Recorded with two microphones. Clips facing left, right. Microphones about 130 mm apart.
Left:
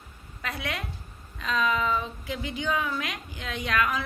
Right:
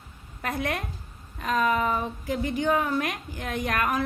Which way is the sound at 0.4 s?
45° right (ahead or behind).